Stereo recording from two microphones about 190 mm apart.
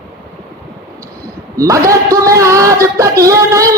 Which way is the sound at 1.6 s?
15° right (ahead or behind).